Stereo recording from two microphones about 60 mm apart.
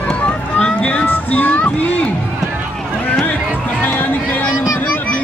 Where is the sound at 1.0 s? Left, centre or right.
Left.